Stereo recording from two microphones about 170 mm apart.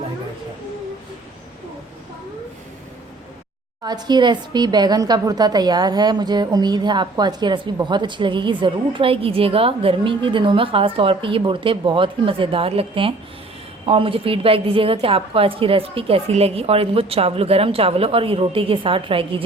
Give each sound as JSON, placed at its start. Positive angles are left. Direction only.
{"t": 3.8, "sound": "a woman's voice", "side_deg": -25}